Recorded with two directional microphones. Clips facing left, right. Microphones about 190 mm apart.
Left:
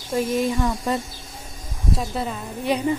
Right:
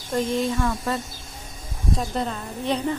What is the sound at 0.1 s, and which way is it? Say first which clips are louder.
Speech: left 1 dB; 10° left (ahead or behind).